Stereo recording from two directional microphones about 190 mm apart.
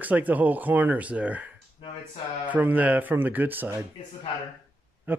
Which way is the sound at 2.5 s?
10° right (ahead or behind).